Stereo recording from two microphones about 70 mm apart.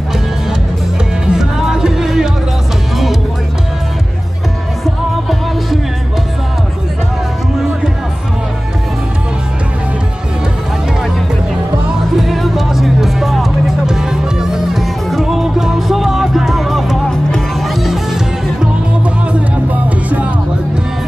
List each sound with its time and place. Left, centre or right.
1.2 s music: centre
12.2 s music: centre
19.3 s music: right